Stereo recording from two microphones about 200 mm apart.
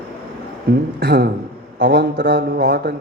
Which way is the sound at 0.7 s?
50° right (ahead or behind).